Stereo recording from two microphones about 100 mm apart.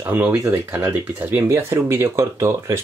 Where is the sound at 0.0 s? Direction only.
20° right (ahead or behind).